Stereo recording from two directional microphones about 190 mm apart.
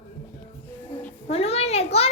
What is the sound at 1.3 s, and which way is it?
Speech, 30° left (ahead or behind).